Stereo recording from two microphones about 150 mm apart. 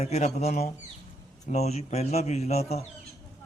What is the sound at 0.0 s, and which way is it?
A man's voice, 45° left (ahead or behind).